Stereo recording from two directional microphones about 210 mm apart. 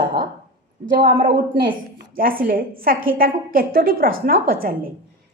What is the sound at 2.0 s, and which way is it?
A woman's voice, 45° right (ahead or behind).